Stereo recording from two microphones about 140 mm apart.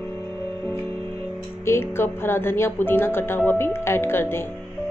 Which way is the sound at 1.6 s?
15° left (ahead or behind).